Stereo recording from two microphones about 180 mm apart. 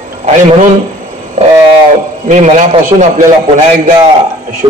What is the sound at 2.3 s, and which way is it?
Speech, 40° right (ahead or behind).